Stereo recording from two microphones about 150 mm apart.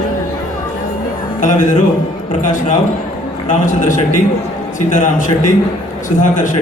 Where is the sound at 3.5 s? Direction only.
60° left (ahead or behind).